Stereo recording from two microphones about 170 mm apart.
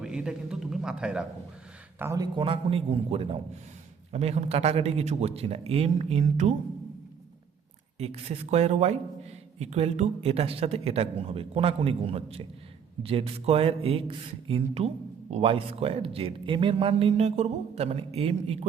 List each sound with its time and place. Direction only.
0.0 s speech: 5° right (ahead or behind)
2.0 s a man's voice: 20° right (ahead or behind); by 6.5 s 40° right (ahead or behind)
7.9 s a man's voice: 40° right (ahead or behind)